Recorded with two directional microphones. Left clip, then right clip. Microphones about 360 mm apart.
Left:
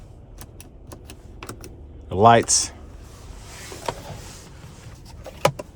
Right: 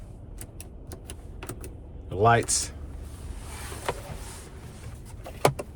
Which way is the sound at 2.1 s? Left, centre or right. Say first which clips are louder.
Left 7 dB; centre.